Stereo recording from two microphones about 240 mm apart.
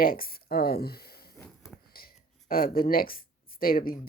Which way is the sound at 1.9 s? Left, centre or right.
Left.